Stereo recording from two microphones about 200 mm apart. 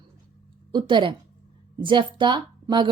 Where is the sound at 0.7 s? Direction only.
25° right (ahead or behind).